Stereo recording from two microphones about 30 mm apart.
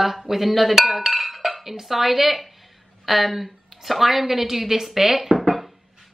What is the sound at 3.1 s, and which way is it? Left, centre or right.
A woman's voice, centre.